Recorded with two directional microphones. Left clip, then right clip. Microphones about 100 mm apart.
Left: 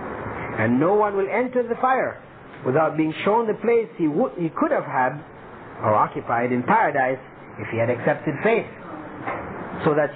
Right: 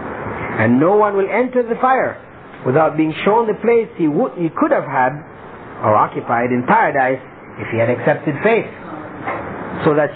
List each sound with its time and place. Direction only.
0.2 s a man's voice: 30° left (ahead or behind)
9.2 s dog: 30° left (ahead or behind)